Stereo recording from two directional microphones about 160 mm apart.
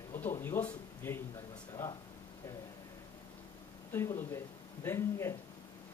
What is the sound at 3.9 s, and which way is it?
Speech, 15° left (ahead or behind).